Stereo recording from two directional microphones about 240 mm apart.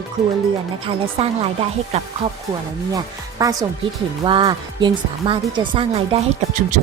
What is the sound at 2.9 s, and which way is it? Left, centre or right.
Speech, centre.